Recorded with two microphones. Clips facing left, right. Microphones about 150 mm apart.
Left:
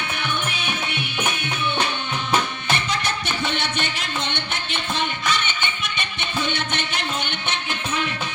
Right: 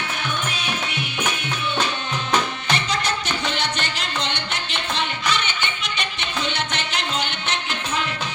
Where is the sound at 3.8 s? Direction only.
50° left (ahead or behind).